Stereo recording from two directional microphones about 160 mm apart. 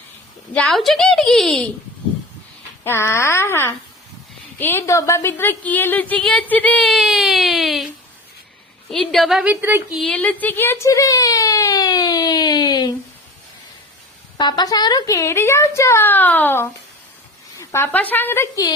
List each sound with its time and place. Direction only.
0.5 s a woman's voice: 5° left (ahead or behind)
2.8 s a woman's voice: 15° left (ahead or behind); by 7.9 s centre (ahead or behind)
8.9 s a woman's voice: centre (ahead or behind)
9.9 s speech: 5° left (ahead or behind); by 12.9 s 25° left (ahead or behind)
14.3 s a woman's voice: 25° left (ahead or behind)